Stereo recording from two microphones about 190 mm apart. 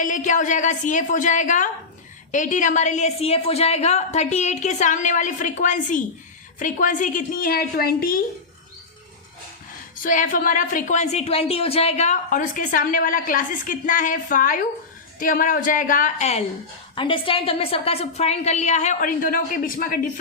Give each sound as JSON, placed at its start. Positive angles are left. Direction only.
{"t": 0.0, "sound": "a woman's voice", "side_deg": 40}
{"t": 10.0, "sound": "speech", "side_deg": 45}
{"t": 16.9, "sound": "a woman's voice", "side_deg": 25}